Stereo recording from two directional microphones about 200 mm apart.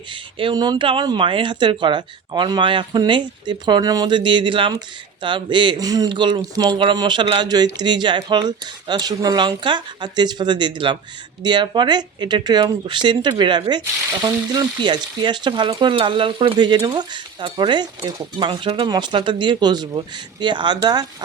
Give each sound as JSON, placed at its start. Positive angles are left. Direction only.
{"t": 0.1, "sound": "speech", "side_deg": -25}